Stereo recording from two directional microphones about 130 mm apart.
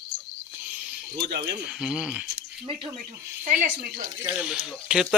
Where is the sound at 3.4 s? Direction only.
85° right.